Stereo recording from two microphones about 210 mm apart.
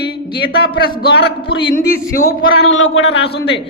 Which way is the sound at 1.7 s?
45° left (ahead or behind).